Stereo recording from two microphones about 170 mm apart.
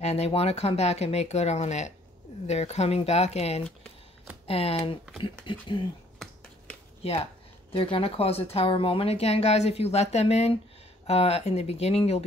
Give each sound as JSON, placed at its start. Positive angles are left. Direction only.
{"t": 0.0, "sound": "speech", "side_deg": 40}
{"t": 7.0, "sound": "speech", "side_deg": 35}